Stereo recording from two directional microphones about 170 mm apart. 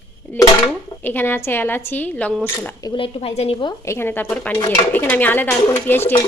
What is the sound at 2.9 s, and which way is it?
Speech, 30° left (ahead or behind).